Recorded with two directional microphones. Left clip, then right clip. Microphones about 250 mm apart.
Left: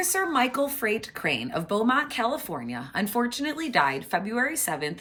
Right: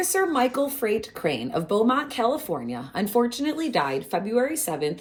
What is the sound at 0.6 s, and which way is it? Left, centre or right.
Speech, left.